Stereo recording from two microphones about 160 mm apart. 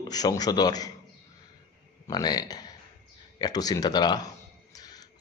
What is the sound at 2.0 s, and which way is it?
Speech, 25° left (ahead or behind).